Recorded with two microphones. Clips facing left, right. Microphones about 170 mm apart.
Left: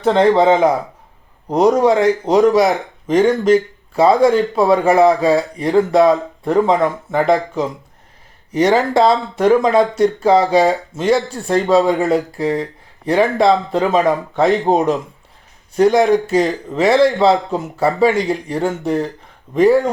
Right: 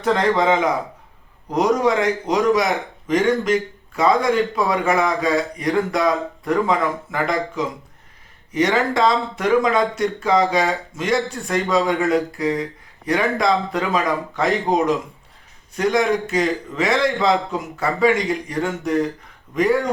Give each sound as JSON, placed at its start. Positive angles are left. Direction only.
{"t": 0.0, "sound": "speech", "side_deg": 30}